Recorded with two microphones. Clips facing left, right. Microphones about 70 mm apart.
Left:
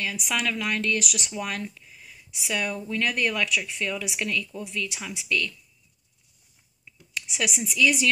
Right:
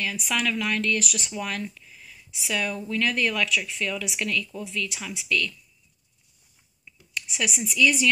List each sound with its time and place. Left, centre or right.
0.0 s speech: centre
1.8 s a sound: centre
2.9 s speech: centre
7.2 s speech: centre